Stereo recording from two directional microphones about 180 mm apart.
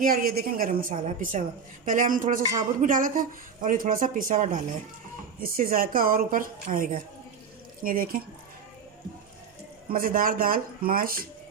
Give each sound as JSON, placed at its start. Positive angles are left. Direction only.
{"t": 0.0, "sound": "a woman's voice", "side_deg": -55}
{"t": 9.9, "sound": "a woman's voice", "side_deg": -50}